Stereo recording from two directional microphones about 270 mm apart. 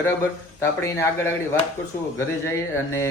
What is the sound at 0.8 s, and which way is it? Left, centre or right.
Speech, centre.